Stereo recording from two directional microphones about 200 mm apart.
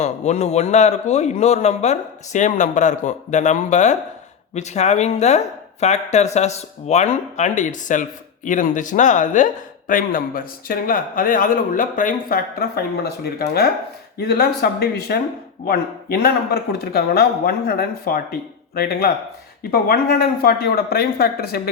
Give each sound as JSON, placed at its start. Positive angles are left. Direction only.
{"t": 0.0, "sound": "a man's voice", "side_deg": 35}